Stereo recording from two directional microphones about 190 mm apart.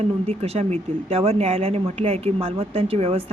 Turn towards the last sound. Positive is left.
turn(degrees=-30)  # may be behind; listen again after turning